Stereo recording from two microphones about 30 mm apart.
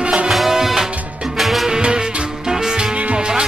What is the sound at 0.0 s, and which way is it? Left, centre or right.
Music, right.